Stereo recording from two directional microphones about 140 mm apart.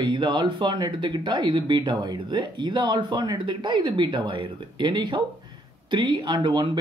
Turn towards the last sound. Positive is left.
turn(degrees=-35)  # may be behind; listen again after turning